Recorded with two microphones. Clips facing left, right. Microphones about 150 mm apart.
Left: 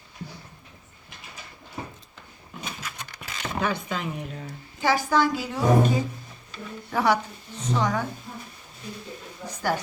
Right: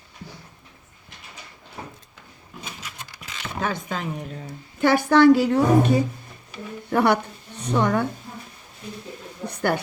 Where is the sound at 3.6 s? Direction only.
45° right (ahead or behind).